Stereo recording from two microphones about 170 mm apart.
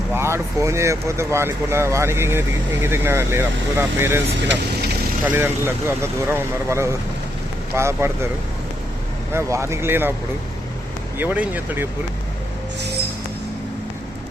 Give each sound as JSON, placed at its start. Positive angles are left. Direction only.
{"t": 0.1, "sound": "speech", "side_deg": -15}
{"t": 5.2, "sound": "speech", "side_deg": -10}
{"t": 9.3, "sound": "speech", "side_deg": -15}
{"t": 11.2, "sound": "speech", "side_deg": -10}